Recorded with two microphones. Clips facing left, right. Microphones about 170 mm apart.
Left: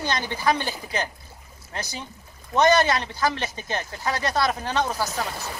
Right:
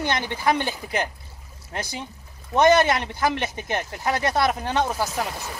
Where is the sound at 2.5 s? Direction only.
20° right (ahead or behind).